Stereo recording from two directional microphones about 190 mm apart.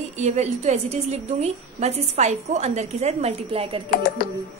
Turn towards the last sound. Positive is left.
turn(degrees=50)  # may be behind; listen again after turning